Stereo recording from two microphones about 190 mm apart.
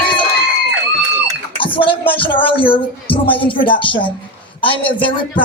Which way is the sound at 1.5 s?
25° left (ahead or behind).